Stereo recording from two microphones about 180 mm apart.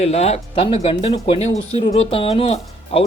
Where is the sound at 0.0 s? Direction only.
35° left (ahead or behind).